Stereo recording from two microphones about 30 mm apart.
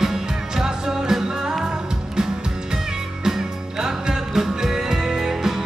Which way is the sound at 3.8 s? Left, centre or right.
Centre.